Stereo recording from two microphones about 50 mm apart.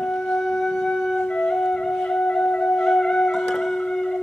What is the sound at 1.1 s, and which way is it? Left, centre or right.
Flute, left.